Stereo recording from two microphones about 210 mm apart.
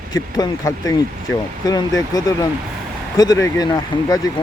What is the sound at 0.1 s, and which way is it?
Speech, 15° left (ahead or behind).